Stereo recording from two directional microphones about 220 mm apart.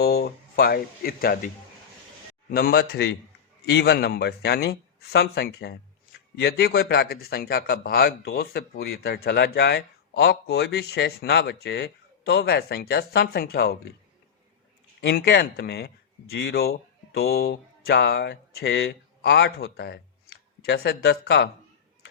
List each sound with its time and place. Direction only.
0.0 s speech: 45° left (ahead or behind)
2.5 s speech: 45° left (ahead or behind)
15.0 s speech: 50° left (ahead or behind)